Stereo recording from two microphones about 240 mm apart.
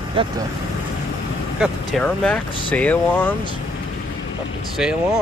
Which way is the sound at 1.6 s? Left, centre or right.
Centre.